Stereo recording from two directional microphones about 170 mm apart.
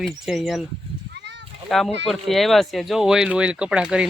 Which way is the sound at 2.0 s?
Centre (ahead or behind).